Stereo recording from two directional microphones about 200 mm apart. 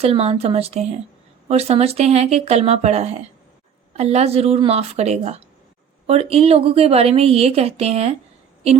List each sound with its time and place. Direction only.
0.0 s a woman's voice: 30° right (ahead or behind)